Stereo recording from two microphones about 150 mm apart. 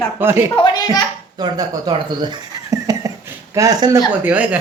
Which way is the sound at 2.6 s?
20° right (ahead or behind).